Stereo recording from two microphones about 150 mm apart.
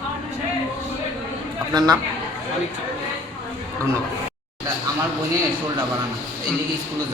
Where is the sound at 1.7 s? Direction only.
25° right (ahead or behind).